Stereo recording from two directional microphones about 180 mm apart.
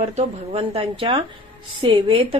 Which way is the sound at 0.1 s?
30° right (ahead or behind).